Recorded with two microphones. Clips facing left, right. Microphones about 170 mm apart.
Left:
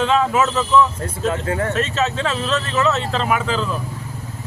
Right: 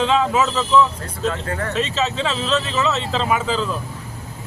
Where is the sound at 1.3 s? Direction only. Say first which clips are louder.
Left 3 dB; 25° left (ahead or behind).